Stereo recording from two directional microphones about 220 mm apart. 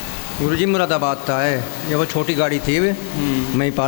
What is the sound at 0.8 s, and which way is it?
Speech, 25° left (ahead or behind).